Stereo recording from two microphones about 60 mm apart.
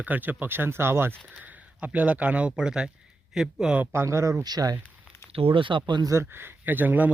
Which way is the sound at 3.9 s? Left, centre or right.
Right.